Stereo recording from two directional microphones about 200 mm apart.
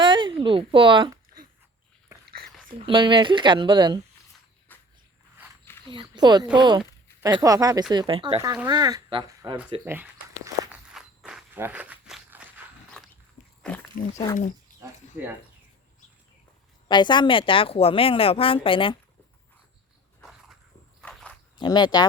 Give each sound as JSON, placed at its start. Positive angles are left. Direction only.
{"t": 0.0, "sound": "a sound", "side_deg": -25}
{"t": 2.6, "sound": "speech", "side_deg": -25}
{"t": 4.7, "sound": "walk", "side_deg": 10}
{"t": 5.9, "sound": "speech", "side_deg": -25}
{"t": 9.8, "sound": "walk", "side_deg": -10}
{"t": 13.6, "sound": "wild animals", "side_deg": 5}
{"t": 14.7, "sound": "a sound", "side_deg": 40}
{"t": 16.9, "sound": "speech", "side_deg": 20}
{"t": 21.0, "sound": "walk", "side_deg": 5}
{"t": 21.6, "sound": "speech", "side_deg": 20}